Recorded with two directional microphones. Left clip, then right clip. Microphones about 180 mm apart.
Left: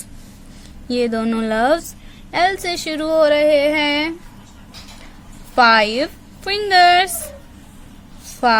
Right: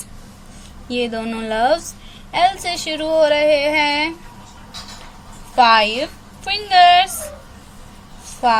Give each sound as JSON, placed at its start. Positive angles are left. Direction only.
{"t": 0.9, "sound": "a woman's voice", "side_deg": 45}
{"t": 5.5, "sound": "a woman's voice", "side_deg": 50}
{"t": 8.3, "sound": "a sound", "side_deg": 50}